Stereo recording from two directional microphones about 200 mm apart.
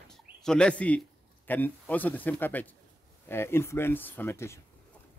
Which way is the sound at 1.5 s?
10° left (ahead or behind).